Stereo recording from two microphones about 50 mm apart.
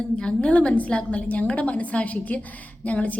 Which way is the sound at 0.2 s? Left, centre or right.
Left.